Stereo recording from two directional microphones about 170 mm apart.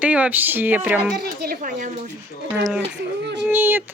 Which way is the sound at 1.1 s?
70° right (ahead or behind).